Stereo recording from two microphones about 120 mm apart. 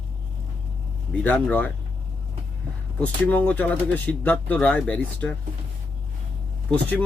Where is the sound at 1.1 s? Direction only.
10° left (ahead or behind).